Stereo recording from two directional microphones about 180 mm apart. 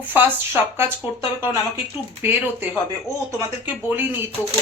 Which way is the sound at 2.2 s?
10° right (ahead or behind).